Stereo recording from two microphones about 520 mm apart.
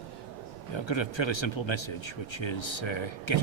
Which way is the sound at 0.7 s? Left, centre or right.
Left.